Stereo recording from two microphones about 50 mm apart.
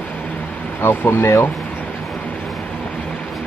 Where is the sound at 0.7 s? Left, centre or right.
Left.